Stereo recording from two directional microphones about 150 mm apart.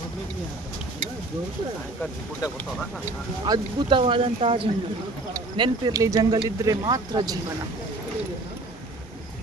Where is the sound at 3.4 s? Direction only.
30° right (ahead or behind).